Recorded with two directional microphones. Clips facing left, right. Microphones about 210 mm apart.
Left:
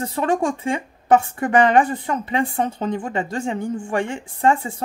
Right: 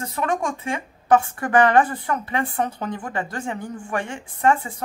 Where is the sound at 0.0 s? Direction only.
30° left (ahead or behind).